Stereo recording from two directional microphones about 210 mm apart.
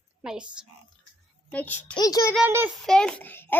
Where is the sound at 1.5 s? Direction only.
10° left (ahead or behind).